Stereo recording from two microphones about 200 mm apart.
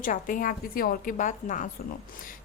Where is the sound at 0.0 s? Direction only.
40° left (ahead or behind).